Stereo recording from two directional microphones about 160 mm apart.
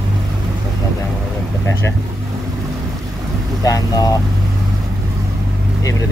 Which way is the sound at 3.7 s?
25° left (ahead or behind).